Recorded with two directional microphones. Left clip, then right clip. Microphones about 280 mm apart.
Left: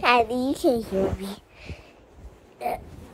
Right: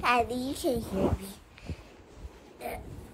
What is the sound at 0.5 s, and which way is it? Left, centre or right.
Speech, centre.